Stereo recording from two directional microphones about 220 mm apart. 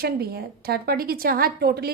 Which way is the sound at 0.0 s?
45° right (ahead or behind).